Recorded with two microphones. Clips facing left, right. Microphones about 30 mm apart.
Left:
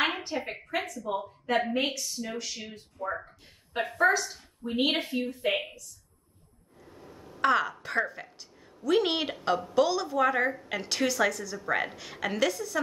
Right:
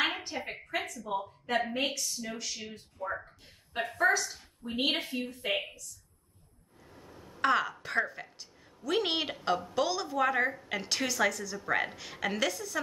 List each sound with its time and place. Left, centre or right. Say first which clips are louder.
0.0 s a woman's voice: left 3 dB; centre
7.0 s a sound: left 3 dB; left
7.3 s a woman's voice: left 3 dB; centre